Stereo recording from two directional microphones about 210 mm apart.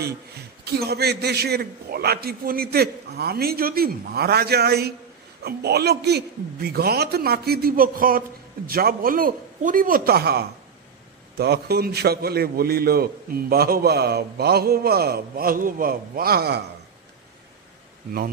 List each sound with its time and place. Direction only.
0.7 s a man's voice: 50° right (ahead or behind)